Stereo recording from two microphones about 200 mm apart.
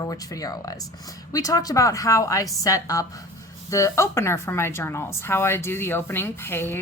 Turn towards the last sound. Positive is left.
turn(degrees=10)  # may be behind; listen again after turning